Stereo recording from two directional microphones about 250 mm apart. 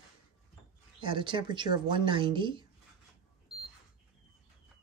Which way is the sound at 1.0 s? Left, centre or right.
Centre.